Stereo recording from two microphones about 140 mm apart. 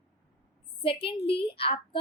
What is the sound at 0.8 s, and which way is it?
A woman's voice, 40° left (ahead or behind).